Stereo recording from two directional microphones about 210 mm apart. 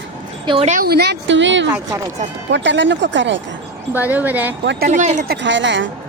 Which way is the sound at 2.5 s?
60° right (ahead or behind).